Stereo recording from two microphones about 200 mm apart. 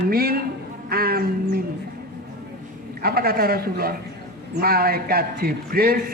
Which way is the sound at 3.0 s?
50° right (ahead or behind).